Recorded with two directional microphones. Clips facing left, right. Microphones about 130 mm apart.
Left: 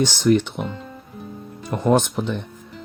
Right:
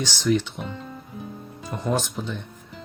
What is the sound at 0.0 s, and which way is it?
Speech, 55° left (ahead or behind).